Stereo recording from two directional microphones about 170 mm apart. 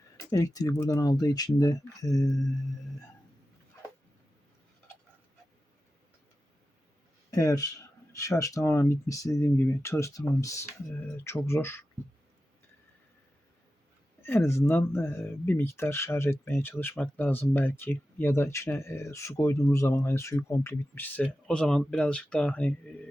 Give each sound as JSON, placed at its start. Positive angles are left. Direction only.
{"t": 0.3, "sound": "speech", "side_deg": 20}
{"t": 7.3, "sound": "speech", "side_deg": 20}
{"t": 14.2, "sound": "speech", "side_deg": 15}